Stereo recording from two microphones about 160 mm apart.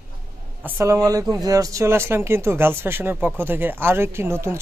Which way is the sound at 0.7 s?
15° right (ahead or behind).